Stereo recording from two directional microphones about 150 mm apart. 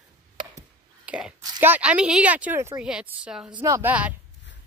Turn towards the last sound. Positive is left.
turn(degrees=-10)  # may be behind; listen again after turning